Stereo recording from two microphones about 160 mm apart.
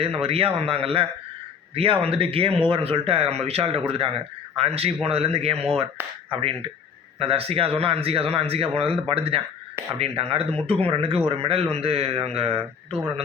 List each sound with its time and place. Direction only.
0.2 s speech: 35° right (ahead or behind)